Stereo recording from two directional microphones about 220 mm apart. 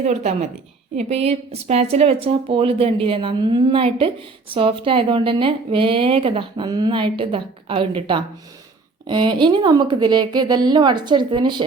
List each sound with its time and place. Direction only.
0.0 s a woman's voice: 30° right (ahead or behind)